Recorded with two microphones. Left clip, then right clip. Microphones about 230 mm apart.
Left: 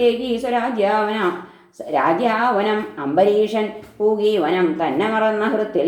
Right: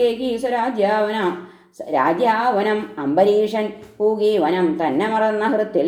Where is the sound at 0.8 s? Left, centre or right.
Right.